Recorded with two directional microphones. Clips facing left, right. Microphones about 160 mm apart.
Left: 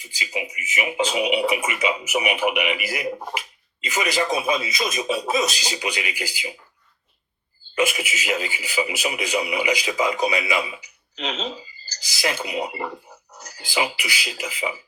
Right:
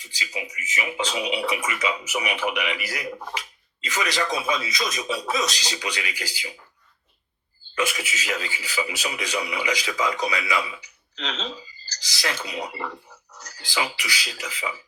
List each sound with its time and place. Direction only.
0.3 s speech: 15° left (ahead or behind)
3.3 s a sound: 10° left (ahead or behind)
4.2 s a man's voice: 25° left (ahead or behind)
7.8 s speech: 15° left (ahead or behind)